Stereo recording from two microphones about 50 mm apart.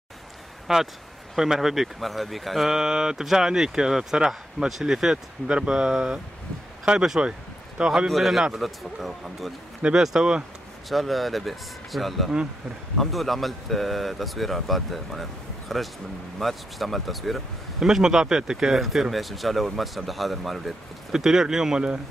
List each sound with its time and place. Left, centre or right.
0.7 s speech: centre
8.1 s speech: centre
10.9 s speech: centre
17.8 s speech: centre